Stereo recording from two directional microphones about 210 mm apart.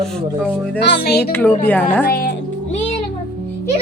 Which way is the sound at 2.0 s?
45° left (ahead or behind).